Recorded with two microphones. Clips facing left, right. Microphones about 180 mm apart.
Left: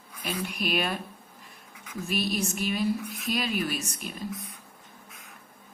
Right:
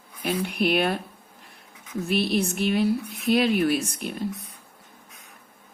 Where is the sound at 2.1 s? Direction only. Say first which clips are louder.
Right 5 dB; 65° right (ahead or behind).